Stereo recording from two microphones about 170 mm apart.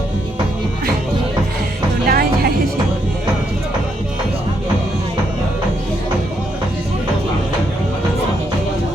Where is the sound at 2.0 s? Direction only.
60° right (ahead or behind).